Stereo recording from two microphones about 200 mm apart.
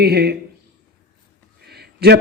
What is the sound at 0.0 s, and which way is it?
Speech, 50° right (ahead or behind).